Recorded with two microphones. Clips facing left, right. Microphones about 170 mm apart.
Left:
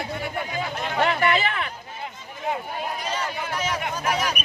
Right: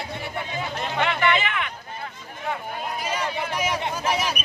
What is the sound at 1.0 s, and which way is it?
Speech, 35° left (ahead or behind).